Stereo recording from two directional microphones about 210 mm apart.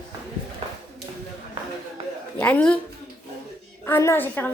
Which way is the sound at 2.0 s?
25° right (ahead or behind).